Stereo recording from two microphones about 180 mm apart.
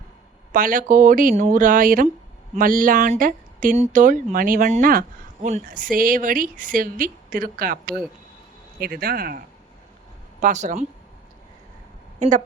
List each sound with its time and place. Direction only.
0.5 s speech: 50° right (ahead or behind)
8.8 s speech: 55° right (ahead or behind)
10.4 s speech: 45° right (ahead or behind)